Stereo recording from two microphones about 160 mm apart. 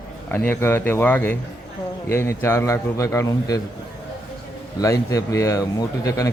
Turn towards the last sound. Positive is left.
turn(degrees=20)  # may be behind; listen again after turning